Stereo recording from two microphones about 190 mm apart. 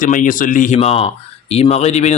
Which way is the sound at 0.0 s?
45° left (ahead or behind).